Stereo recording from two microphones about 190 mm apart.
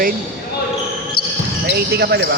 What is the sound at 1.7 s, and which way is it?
Speech, 60° right (ahead or behind).